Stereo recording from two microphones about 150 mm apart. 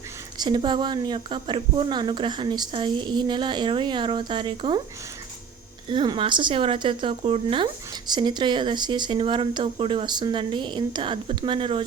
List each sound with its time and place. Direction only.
0.3 s speech: 30° right (ahead or behind)
5.9 s speech: 35° right (ahead or behind)